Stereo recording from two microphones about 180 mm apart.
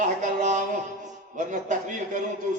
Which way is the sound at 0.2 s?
45° right (ahead or behind).